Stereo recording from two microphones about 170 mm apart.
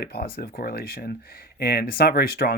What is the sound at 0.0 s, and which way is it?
Speech, 70° left (ahead or behind).